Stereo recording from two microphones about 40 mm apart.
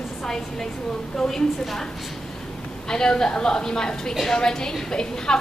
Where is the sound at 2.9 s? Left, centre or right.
Centre.